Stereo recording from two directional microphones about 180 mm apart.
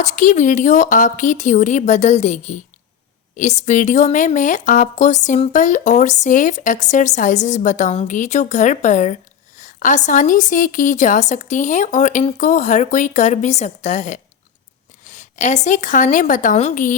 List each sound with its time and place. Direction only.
0.0 s a woman's voice: 45° left (ahead or behind)